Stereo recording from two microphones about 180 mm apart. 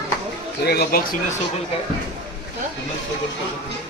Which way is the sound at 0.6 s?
60° left (ahead or behind).